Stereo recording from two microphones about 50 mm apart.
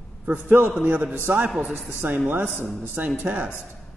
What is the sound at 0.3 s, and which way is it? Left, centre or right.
Speech, right.